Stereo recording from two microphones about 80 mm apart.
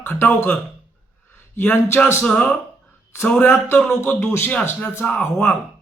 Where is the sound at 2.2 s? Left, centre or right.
Centre.